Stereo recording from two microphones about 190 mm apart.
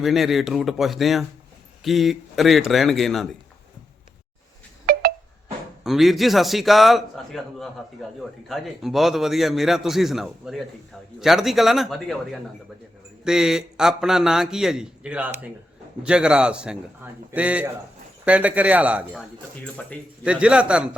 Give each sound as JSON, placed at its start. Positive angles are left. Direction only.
{"t": 0.0, "sound": "a man's voice", "side_deg": 0}
{"t": 4.9, "sound": "telephone dialing", "side_deg": -55}
{"t": 5.8, "sound": "a man's voice", "side_deg": 0}